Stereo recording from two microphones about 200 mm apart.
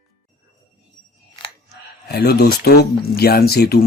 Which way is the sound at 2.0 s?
55° left (ahead or behind).